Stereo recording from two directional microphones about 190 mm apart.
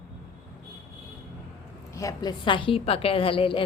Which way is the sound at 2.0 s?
20° left (ahead or behind).